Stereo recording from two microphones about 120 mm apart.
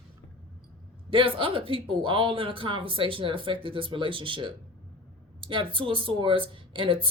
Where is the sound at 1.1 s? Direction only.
45° right (ahead or behind).